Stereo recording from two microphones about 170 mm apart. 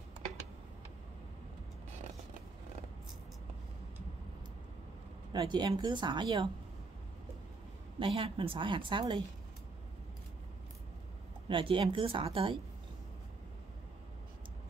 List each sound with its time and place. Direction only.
5.3 s speech: 25° right (ahead or behind)
8.0 s speech: 30° right (ahead or behind)
11.4 s a woman's voice: 30° right (ahead or behind)